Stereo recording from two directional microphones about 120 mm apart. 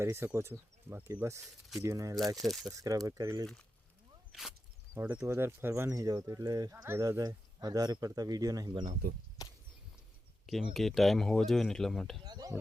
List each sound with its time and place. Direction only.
0.0 s speech: 20° right (ahead or behind)
2.3 s speech: centre (ahead or behind)
2.7 s speech: 30° right (ahead or behind)
4.3 s speech: centre (ahead or behind)
4.9 s speech: 15° right (ahead or behind); by 8.8 s 35° right (ahead or behind)
9.4 s a sound: 30° left (ahead or behind)
10.4 s speech: centre (ahead or behind)
12.2 s speech: 35° right (ahead or behind)